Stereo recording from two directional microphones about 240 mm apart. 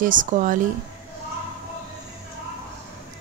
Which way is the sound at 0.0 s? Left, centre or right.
Right.